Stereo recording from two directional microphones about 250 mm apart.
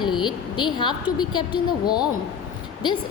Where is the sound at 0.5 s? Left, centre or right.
Centre.